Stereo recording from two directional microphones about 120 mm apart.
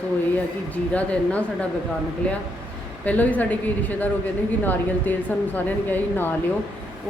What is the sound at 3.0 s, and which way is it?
A woman's voice, 15° left (ahead or behind).